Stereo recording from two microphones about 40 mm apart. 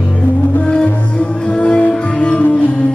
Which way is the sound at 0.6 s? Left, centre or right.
Left.